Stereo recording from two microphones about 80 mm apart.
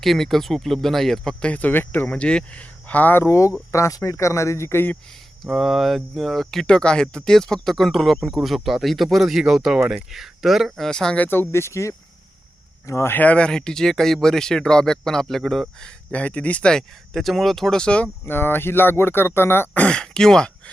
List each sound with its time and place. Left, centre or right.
0.0 s speech: centre; by 2.0 s left
2.0 s speech: centre
3.2 s speech: left
5.5 s speech: centre
11.2 s speech: left
13.1 s speech: centre
15.8 s speech: centre
18.3 s speech: left; by 20.5 s centre